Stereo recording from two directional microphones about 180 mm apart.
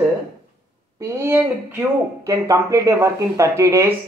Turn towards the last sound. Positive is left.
turn(degrees=-15)  # may be behind; listen again after turning